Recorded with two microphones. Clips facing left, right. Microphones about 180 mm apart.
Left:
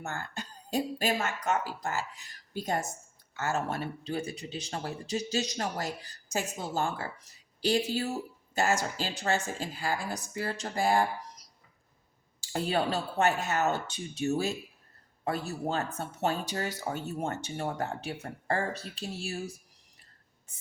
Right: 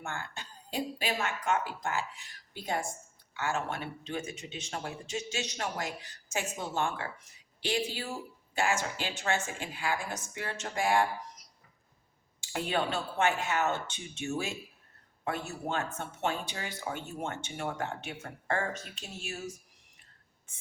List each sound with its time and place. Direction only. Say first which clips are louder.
0.0 s speech: left 2 dB; 40° left (ahead or behind)
12.4 s speech: left 2 dB; 35° left (ahead or behind)